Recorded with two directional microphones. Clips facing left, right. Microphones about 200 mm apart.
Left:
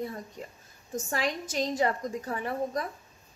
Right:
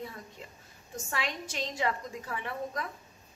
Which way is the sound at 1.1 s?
40° left (ahead or behind).